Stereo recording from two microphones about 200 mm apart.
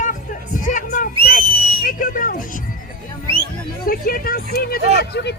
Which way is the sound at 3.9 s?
45° left (ahead or behind).